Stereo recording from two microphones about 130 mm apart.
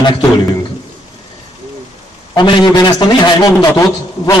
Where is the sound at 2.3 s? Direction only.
35° left (ahead or behind).